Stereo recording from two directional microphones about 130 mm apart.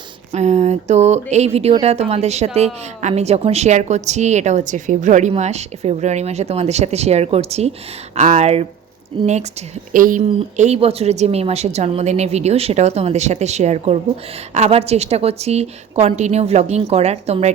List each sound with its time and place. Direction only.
0.3 s a woman's voice: 60° right (ahead or behind)
10.8 s a woman's voice: 50° right (ahead or behind)